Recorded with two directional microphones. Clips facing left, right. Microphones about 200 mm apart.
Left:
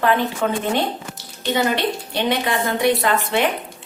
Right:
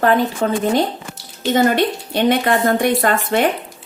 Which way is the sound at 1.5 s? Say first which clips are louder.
Right 5 dB; 50° right (ahead or behind).